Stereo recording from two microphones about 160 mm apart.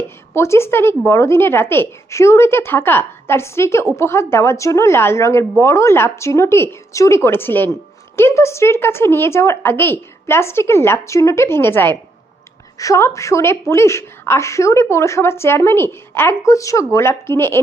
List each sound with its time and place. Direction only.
0.3 s a woman's voice: 15° left (ahead or behind)